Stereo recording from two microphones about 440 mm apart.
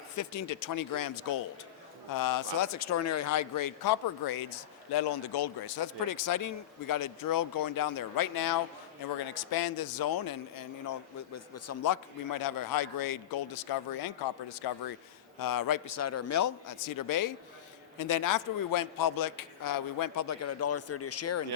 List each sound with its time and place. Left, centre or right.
0.2 s a man's voice: left
15.4 s speech: left